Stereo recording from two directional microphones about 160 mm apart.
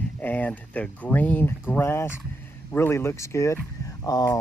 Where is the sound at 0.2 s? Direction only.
10° left (ahead or behind).